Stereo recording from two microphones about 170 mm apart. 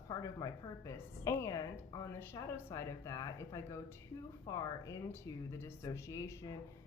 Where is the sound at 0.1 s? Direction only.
20° left (ahead or behind).